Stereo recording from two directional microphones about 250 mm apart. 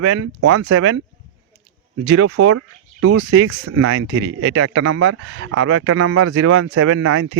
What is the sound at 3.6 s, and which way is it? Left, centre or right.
Speech, right.